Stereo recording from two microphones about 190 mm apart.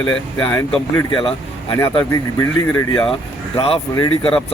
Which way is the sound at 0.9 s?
25° left (ahead or behind).